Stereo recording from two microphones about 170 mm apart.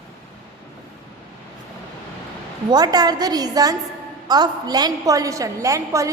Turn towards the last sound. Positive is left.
turn(degrees=-20)  # may be behind; listen again after turning